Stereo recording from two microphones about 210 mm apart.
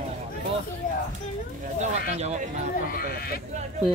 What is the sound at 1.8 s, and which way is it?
Speech, 30° right (ahead or behind).